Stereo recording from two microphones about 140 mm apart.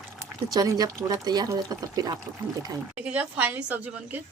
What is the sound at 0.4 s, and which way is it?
Speech, 25° right (ahead or behind).